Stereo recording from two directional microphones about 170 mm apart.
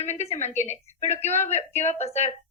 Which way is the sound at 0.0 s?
40° left (ahead or behind).